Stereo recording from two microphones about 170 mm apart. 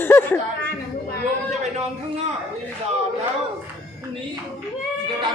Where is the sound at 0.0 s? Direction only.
10° left (ahead or behind).